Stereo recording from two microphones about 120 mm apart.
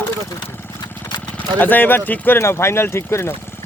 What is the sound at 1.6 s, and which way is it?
Speech, 15° left (ahead or behind).